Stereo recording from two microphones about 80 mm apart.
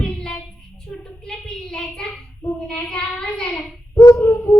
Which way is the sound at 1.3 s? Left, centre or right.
Centre.